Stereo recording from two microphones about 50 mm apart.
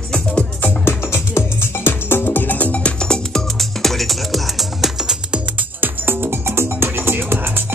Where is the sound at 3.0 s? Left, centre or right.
Centre.